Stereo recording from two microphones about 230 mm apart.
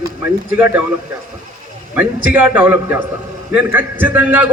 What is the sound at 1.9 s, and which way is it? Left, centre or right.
A man's voice, centre.